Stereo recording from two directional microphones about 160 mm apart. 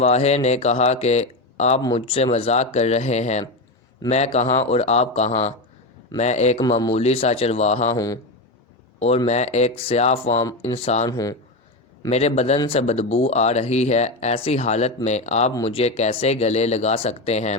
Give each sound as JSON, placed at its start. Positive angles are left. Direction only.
{"t": 0.0, "sound": "speech", "side_deg": 40}
{"t": 6.6, "sound": "speech", "side_deg": 25}
{"t": 6.9, "sound": "speech", "side_deg": 40}
{"t": 7.9, "sound": "speech", "side_deg": 20}
{"t": 9.0, "sound": "speech", "side_deg": 40}
{"t": 11.1, "sound": "speech", "side_deg": 20}
{"t": 12.0, "sound": "speech", "side_deg": 45}